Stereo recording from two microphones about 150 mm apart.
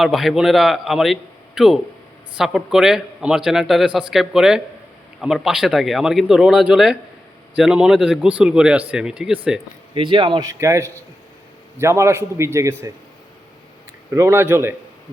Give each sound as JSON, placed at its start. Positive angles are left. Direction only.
{"t": 0.0, "sound": "a man's voice", "side_deg": 0}
{"t": 9.9, "sound": "a man's voice", "side_deg": -35}
{"t": 14.1, "sound": "speech", "side_deg": -20}